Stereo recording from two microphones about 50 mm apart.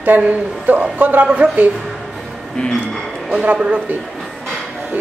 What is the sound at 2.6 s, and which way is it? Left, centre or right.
Speech, left.